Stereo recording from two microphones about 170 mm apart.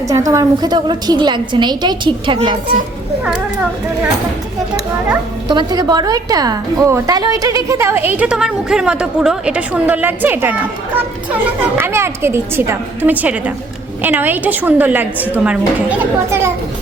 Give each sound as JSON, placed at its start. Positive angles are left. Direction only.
{"t": 0.1, "sound": "a woman's voice", "side_deg": -20}
{"t": 5.5, "sound": "a woman's voice", "side_deg": -25}